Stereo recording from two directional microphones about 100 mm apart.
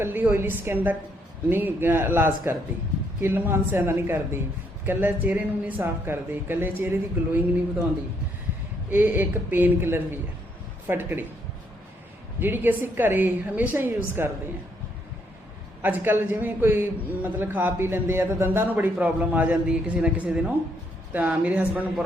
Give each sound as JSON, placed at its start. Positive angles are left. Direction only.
{"t": 0.0, "sound": "a woman's voice", "side_deg": -20}
{"t": 8.9, "sound": "a woman's voice", "side_deg": -20}
{"t": 12.4, "sound": "a woman's voice", "side_deg": -20}
{"t": 15.8, "sound": "a man's voice", "side_deg": -20}